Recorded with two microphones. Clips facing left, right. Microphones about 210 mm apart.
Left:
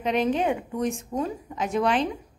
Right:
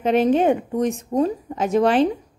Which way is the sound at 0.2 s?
40° right (ahead or behind).